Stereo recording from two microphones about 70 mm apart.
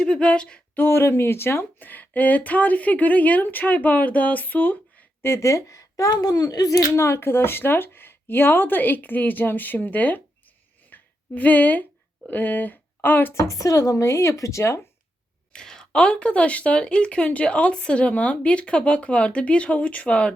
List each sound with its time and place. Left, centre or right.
0.0 s speech: centre
0.7 s speech: left
5.2 s a woman's voice: left
6.9 s speech: left
13.4 s a woman's voice: left
15.5 s speech: centre